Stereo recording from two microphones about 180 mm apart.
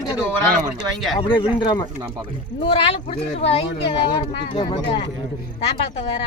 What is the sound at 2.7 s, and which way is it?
Speech, 30° left (ahead or behind).